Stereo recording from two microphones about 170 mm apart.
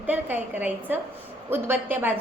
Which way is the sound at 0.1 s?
10° right (ahead or behind).